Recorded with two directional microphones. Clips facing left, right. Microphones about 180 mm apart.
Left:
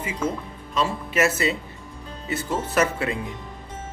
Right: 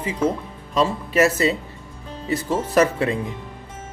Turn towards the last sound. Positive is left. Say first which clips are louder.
# right 5 dB
turn(degrees=-35)  # may be behind; listen again after turning